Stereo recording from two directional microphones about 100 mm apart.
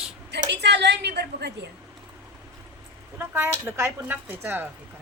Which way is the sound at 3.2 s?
25° right (ahead or behind).